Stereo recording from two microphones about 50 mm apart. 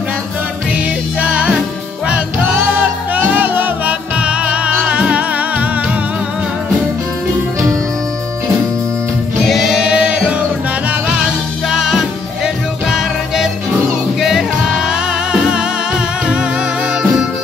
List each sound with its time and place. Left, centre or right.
0.7 s music: right
2.7 s music: right
4.2 s music: right
9.5 s choir: centre
9.8 s music: right
11.7 s music: centre